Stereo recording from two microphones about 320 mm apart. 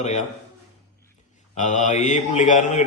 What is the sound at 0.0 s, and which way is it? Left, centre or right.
Speech, left.